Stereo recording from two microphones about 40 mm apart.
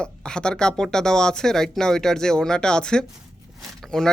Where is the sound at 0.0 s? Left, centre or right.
Left.